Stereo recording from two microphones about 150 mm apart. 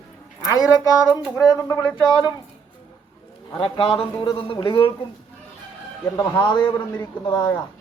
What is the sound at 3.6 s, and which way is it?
Speech, 35° left (ahead or behind).